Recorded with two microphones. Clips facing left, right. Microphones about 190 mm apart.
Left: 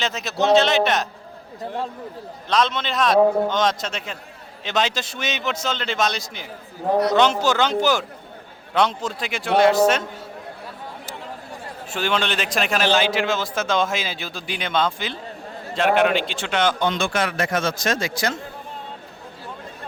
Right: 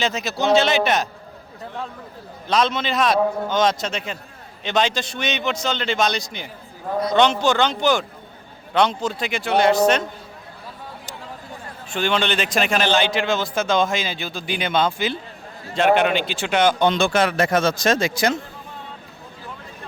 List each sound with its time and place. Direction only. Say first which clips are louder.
0.0 s a man's voice: even; centre (ahead or behind)
2.5 s a man's voice: right 1 dB; centre (ahead or behind)
11.9 s a man's voice: right 2 dB; 5° left (ahead or behind)
16.8 s speech: right 4 dB; 25° right (ahead or behind)